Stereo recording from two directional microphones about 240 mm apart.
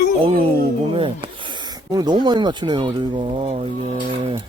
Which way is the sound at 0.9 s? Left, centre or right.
Right.